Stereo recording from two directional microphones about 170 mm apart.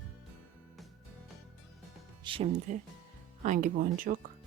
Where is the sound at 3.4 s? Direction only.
45° right (ahead or behind).